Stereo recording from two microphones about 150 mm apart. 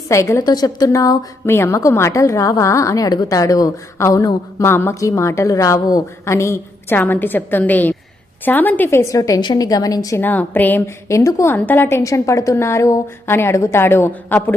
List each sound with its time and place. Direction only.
0.1 s a woman's voice: 20° left (ahead or behind)